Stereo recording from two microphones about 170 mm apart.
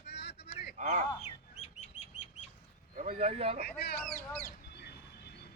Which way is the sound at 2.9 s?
45° right (ahead or behind).